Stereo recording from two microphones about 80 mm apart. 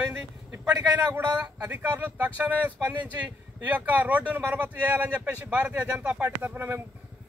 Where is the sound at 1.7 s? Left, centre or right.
Right.